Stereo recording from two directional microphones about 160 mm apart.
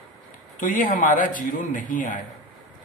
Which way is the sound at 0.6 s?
55° left (ahead or behind).